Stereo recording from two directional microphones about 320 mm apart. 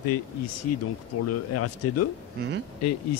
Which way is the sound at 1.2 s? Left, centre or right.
Left.